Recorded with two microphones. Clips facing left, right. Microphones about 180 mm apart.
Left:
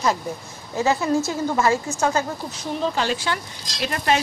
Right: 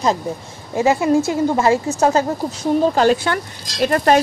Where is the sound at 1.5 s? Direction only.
30° right (ahead or behind).